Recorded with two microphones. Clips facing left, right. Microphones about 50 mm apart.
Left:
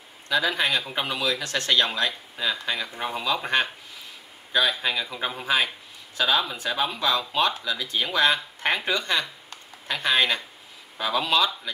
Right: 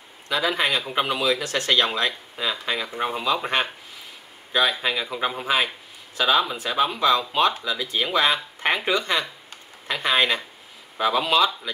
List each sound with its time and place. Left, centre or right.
0.3 s speech: centre